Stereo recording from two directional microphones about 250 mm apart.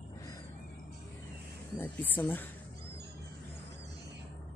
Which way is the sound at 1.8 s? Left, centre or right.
Centre.